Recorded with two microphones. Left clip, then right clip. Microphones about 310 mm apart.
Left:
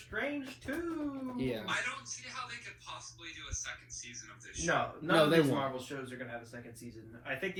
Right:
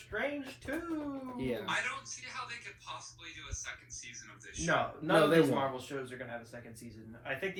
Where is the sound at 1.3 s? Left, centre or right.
Centre.